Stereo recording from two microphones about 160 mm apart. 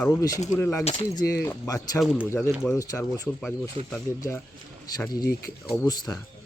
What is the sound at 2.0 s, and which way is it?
Speech, 5° right (ahead or behind).